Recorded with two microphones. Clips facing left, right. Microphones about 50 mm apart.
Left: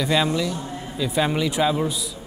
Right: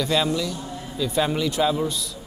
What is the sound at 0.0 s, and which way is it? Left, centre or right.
Speech, centre.